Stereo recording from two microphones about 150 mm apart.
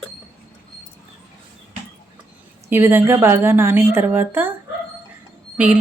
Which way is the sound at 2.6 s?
15° right (ahead or behind).